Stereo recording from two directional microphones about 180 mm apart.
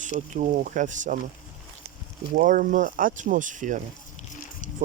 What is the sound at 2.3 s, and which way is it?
Speech, 50° right (ahead or behind).